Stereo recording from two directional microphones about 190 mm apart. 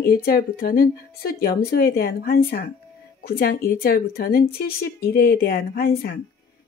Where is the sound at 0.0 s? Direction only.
50° left (ahead or behind).